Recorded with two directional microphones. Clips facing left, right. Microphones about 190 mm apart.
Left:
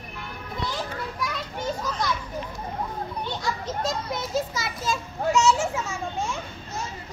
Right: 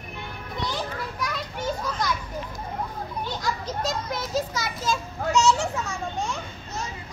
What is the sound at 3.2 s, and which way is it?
Children playing, centre (ahead or behind).